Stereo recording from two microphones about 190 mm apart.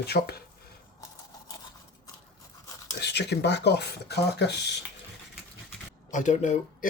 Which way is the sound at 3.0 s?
60° left (ahead or behind).